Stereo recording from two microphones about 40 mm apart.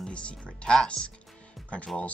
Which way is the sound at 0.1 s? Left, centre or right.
Left.